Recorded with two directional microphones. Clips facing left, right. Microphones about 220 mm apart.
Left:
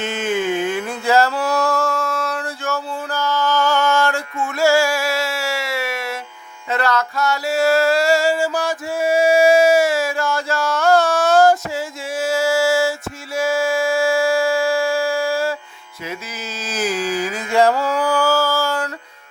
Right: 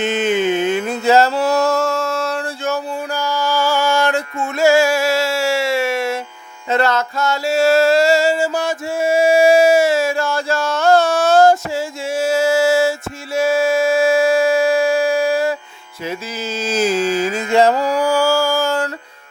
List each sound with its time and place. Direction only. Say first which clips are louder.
0.0 s music: right 4 dB; 20° right (ahead or behind)
2.7 s music: right 2 dB; 10° right (ahead or behind)
16.6 s music: right 5 dB; 25° right (ahead or behind)